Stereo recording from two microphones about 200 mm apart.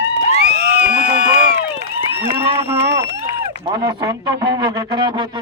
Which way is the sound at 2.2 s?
25° right (ahead or behind).